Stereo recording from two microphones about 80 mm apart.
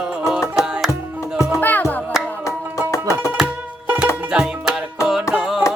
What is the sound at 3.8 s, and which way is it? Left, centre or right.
Music, right.